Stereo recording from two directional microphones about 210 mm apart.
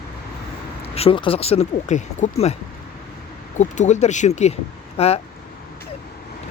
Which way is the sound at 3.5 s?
35° left (ahead or behind).